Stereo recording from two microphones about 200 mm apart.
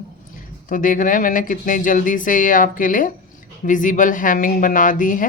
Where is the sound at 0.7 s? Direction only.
40° left (ahead or behind).